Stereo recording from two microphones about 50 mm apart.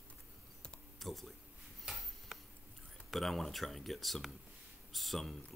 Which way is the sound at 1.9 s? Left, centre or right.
Centre.